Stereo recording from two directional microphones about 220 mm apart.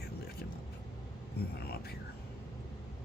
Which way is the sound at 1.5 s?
45° left (ahead or behind).